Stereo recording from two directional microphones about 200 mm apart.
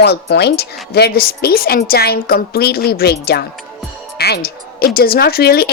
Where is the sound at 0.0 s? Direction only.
55° left (ahead or behind).